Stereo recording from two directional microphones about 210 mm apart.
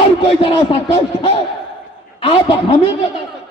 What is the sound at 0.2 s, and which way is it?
A man's voice, 25° left (ahead or behind).